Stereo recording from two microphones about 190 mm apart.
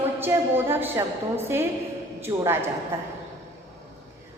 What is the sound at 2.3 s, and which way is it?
Speech, 15° right (ahead or behind).